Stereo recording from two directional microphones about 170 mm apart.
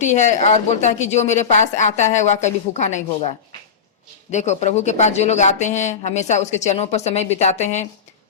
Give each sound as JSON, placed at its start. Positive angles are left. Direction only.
{"t": 0.0, "sound": "a woman's voice", "side_deg": 45}
{"t": 4.3, "sound": "speech", "side_deg": 45}